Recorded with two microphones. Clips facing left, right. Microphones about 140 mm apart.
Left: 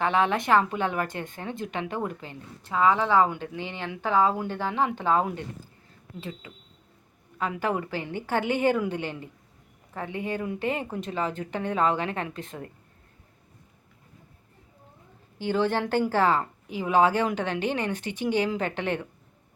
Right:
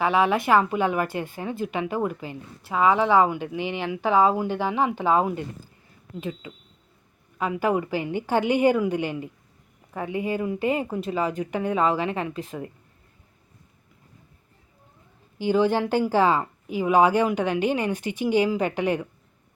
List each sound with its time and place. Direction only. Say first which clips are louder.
0.0 s speech: right 3 dB; 5° right (ahead or behind)
15.4 s speech: right 4 dB; 15° right (ahead or behind)